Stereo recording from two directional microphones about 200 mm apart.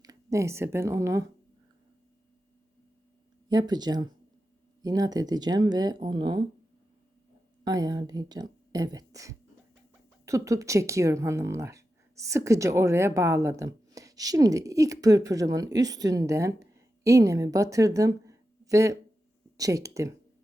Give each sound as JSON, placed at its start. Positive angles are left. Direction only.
{"t": 0.0, "sound": "speech", "side_deg": -15}
{"t": 3.5, "sound": "speech", "side_deg": -20}
{"t": 7.6, "sound": "speech", "side_deg": -20}